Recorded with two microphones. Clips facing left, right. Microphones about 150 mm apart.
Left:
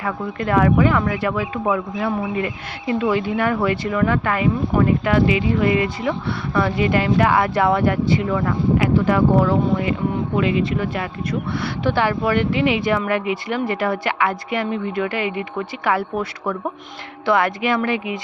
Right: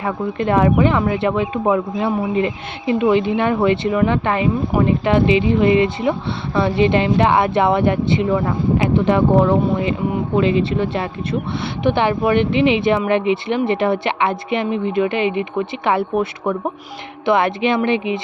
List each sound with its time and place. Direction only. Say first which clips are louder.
0.0 s speech: right 4 dB; 25° right (ahead or behind)